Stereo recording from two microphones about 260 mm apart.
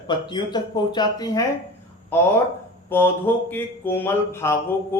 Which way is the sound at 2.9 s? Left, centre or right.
Centre.